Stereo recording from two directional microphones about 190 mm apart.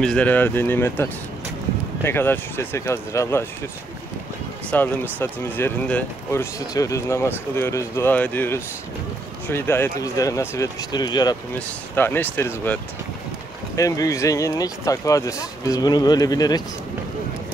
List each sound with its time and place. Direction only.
0.0 s speech: 5° left (ahead or behind)
4.6 s speech: 10° left (ahead or behind)
11.9 s speech: 10° left (ahead or behind)
13.7 s speech: 20° left (ahead or behind)